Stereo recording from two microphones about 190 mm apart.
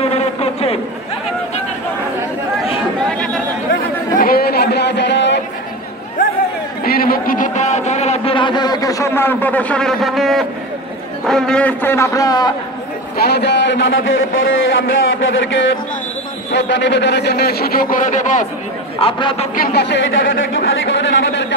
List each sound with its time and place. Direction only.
0.0 s a sound: 35° left (ahead or behind)
3.1 s chatter: 5° left (ahead or behind)
4.2 s a sound: 50° left (ahead or behind)
6.8 s a sound: 50° left (ahead or behind); by 10.4 s centre (ahead or behind)
11.2 s a man's voice: 5° left (ahead or behind); by 12.5 s 20° left (ahead or behind)
13.2 s a man's voice: 60° left (ahead or behind); by 15.7 s 80° left
16.5 s a man's voice: 65° left (ahead or behind); by 18.5 s 40° left (ahead or behind)
18.9 s a man's voice: 25° left (ahead or behind)
19.5 s a man's voice: 55° left (ahead or behind)